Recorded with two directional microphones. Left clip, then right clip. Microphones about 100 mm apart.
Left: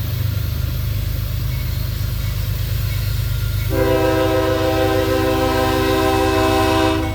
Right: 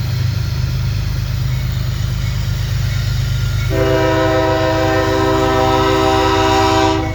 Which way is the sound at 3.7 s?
45° left (ahead or behind).